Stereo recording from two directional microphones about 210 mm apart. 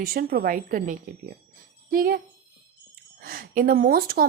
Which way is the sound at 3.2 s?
45° right (ahead or behind).